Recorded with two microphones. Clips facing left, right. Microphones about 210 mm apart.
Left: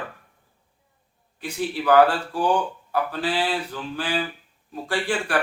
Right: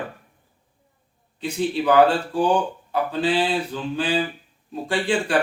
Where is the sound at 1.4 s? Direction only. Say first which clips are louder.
Right 3 dB; 20° right (ahead or behind).